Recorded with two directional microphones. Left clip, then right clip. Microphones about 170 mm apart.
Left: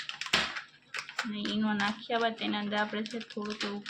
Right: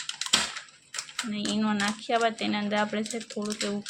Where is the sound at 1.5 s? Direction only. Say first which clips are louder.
Right 3 dB; 35° right (ahead or behind).